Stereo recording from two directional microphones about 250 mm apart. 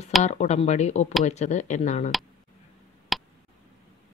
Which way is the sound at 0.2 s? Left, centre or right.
Left.